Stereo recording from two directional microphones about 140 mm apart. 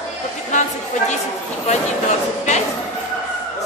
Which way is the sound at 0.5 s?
60° left (ahead or behind).